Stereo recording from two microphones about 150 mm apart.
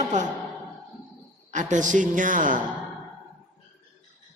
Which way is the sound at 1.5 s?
55° right (ahead or behind).